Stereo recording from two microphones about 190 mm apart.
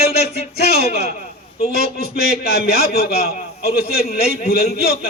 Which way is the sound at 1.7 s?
55° left (ahead or behind).